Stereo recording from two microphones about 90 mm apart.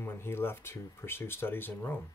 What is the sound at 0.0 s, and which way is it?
Speech, 25° left (ahead or behind).